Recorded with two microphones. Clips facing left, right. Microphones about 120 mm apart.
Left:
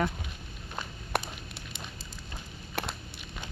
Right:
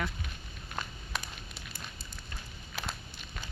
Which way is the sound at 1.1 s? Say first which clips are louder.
Left 7 dB; 65° left (ahead or behind).